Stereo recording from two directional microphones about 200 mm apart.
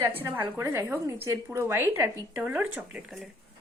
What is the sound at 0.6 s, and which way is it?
Speech, 10° right (ahead or behind).